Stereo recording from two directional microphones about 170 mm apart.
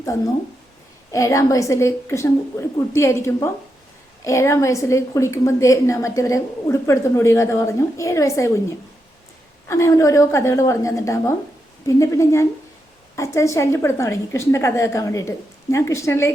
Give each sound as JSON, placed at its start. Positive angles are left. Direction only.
{"t": 1.1, "sound": "a woman's voice", "side_deg": 20}
{"t": 9.6, "sound": "a woman's voice", "side_deg": 15}